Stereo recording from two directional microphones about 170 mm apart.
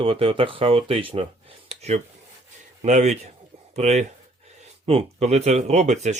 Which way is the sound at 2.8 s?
45° right (ahead or behind).